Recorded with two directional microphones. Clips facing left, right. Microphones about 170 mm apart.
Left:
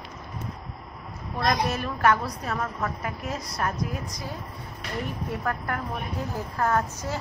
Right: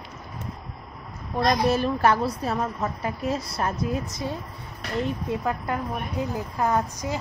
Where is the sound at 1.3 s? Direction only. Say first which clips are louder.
Right 4 dB; 30° right (ahead or behind).